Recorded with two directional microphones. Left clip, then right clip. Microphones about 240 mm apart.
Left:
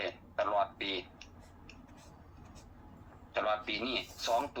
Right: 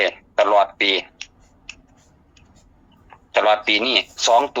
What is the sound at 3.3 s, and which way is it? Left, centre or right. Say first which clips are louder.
Speech: right 17 dB; right.